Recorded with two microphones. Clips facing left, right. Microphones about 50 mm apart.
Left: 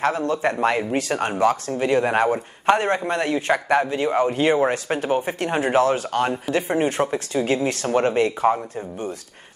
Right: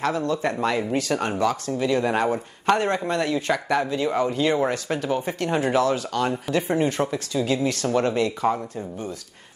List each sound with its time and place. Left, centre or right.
0.3 s speech: left
6.5 s speech: left